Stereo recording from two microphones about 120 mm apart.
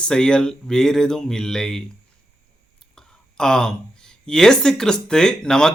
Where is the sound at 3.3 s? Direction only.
5° left (ahead or behind).